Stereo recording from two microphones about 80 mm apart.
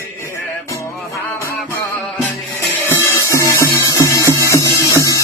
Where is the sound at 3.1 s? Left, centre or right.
Left.